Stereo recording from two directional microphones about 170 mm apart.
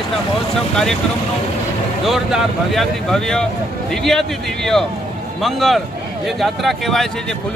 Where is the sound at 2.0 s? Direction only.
Centre (ahead or behind).